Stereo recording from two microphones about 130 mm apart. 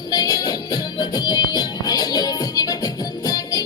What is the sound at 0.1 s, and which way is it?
Music, 30° left (ahead or behind).